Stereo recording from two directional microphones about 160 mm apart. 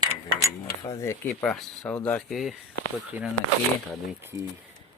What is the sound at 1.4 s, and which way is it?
Speech, centre (ahead or behind).